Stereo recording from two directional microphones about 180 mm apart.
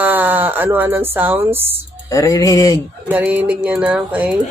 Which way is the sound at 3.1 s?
10° right (ahead or behind).